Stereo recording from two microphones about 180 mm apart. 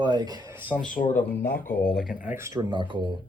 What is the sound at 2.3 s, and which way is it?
Speech, 15° right (ahead or behind).